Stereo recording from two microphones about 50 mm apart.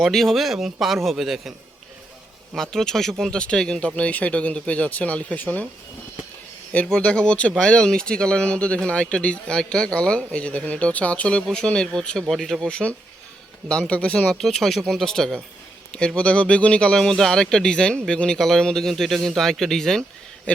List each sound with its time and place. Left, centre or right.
0.0 s a man's voice: centre
2.6 s speech: centre; by 5.6 s left
6.8 s speech: centre
7.5 s speech: centre
11.6 s speech: centre
12.3 s speech: centre
12.6 s speech: left
14.3 s speech: centre
15.9 s speech: left
18.3 s speech: centre